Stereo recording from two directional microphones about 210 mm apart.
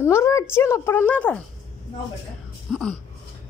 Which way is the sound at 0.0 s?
15° left (ahead or behind).